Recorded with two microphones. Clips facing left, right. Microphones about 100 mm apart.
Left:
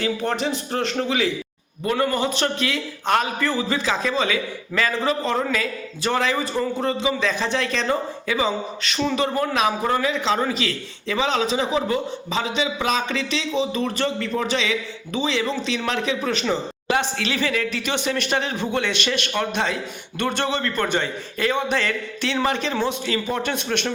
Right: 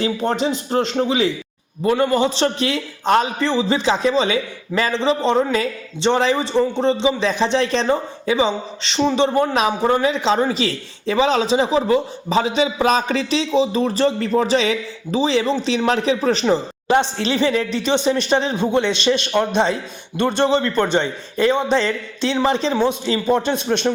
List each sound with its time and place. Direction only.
0.0 s a man's voice: 20° right (ahead or behind)